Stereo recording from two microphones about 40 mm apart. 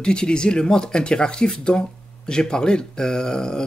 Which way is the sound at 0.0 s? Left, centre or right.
Centre.